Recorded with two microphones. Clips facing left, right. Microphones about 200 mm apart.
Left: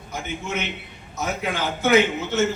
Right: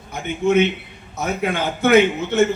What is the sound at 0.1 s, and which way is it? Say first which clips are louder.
A man's voice: right 11 dB; 60° right (ahead or behind).